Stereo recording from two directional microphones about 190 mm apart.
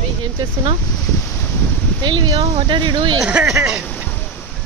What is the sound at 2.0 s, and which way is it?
Speech, 25° right (ahead or behind).